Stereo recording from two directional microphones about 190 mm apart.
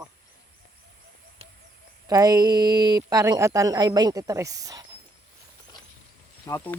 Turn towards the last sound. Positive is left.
turn(degrees=15)  # may be behind; listen again after turning